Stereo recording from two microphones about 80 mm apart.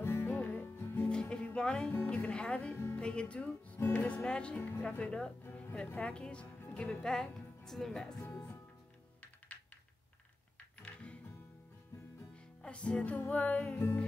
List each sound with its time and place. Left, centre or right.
0.0 s music: left
1.0 s music: centre
3.0 s speech: centre
3.9 s music: centre
4.6 s music: left; by 7.2 s centre
7.6 s speech: centre
10.6 s music: centre
12.4 s music: centre